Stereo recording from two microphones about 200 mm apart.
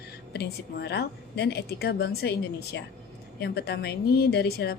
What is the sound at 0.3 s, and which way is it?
A woman's voice, 55° left (ahead or behind).